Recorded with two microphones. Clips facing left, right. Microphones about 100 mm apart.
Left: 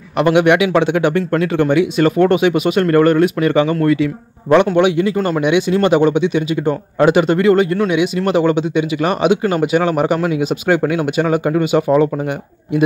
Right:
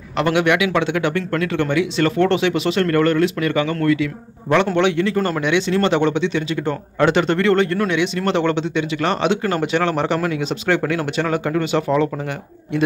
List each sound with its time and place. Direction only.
0.2 s a man's voice: 20° left (ahead or behind)
4.7 s speech: 15° left (ahead or behind)